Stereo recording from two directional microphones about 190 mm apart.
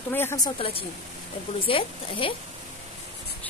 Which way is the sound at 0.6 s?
30° left (ahead or behind).